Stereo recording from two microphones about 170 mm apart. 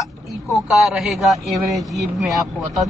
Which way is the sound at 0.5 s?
Centre (ahead or behind).